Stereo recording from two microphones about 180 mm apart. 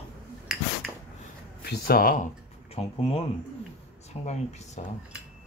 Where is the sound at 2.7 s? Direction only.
30° left (ahead or behind).